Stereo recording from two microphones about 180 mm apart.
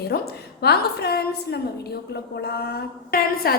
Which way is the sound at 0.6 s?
60° left (ahead or behind).